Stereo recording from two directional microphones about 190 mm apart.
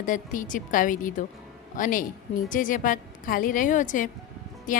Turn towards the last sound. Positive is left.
turn(degrees=40)  # may be behind; listen again after turning